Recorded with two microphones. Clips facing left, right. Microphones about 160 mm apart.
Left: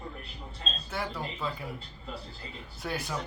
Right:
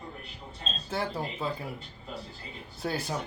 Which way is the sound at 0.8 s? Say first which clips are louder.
Right 3 dB; 30° right (ahead or behind).